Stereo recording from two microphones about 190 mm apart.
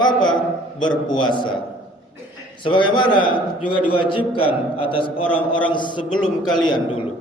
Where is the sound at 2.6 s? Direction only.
25° left (ahead or behind).